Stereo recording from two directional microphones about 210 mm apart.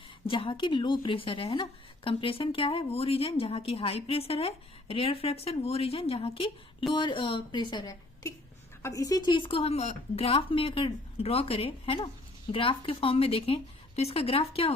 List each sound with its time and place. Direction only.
0.3 s speech: 25° left (ahead or behind)